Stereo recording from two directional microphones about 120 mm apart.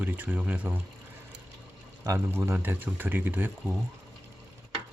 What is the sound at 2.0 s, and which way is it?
Speech, 25° right (ahead or behind).